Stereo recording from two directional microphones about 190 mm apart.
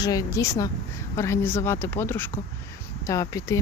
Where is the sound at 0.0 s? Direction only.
20° left (ahead or behind).